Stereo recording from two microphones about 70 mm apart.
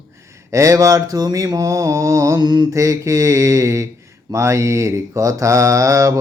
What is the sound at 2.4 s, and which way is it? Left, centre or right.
Mantra, right.